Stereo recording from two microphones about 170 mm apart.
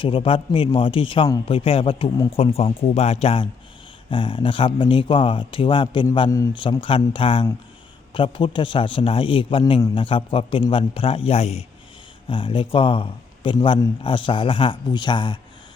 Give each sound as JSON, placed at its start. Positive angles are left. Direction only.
{"t": 0.0, "sound": "a man's voice", "side_deg": 30}
{"t": 6.3, "sound": "a man's voice", "side_deg": 20}
{"t": 6.6, "sound": "a man's voice", "side_deg": 30}